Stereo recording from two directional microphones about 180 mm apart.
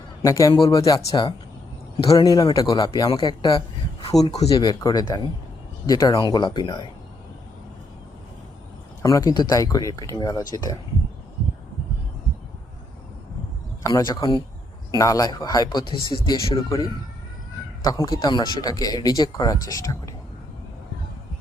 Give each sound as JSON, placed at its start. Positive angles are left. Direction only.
{"t": 0.2, "sound": "speech", "side_deg": 20}
{"t": 9.0, "sound": "speech", "side_deg": 20}
{"t": 13.8, "sound": "speech", "side_deg": 20}